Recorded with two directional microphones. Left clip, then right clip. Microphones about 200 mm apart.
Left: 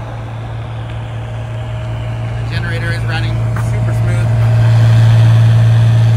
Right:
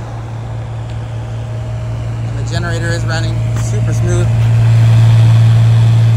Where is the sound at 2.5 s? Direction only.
20° right (ahead or behind).